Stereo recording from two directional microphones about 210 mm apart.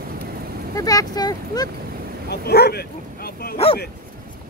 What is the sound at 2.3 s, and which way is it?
Speech, 50° left (ahead or behind).